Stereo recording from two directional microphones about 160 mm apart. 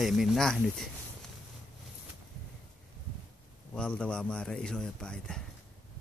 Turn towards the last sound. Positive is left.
turn(degrees=5)  # may be behind; listen again after turning